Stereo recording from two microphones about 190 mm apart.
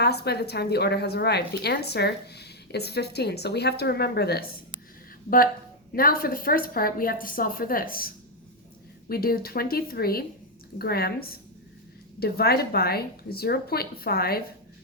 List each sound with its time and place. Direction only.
0.0 s a woman's voice: 60° left (ahead or behind)
6.0 s a woman's voice: 50° left (ahead or behind)